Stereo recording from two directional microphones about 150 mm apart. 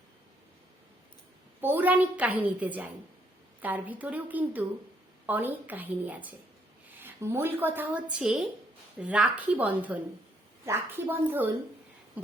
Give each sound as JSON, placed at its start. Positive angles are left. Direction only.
{"t": 1.6, "sound": "a woman's voice", "side_deg": -10}